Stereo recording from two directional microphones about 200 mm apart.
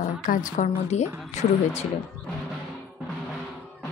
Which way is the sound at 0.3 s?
40° left (ahead or behind).